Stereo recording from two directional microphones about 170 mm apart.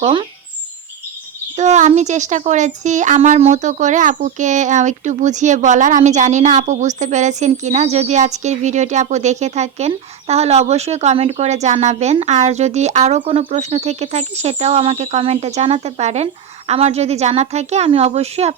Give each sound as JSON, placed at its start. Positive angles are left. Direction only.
{"t": 0.0, "sound": "speech", "side_deg": -30}
{"t": 1.5, "sound": "speech", "side_deg": -45}